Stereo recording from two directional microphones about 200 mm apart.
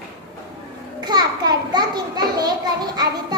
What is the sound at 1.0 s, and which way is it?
A child's voice, 20° right (ahead or behind).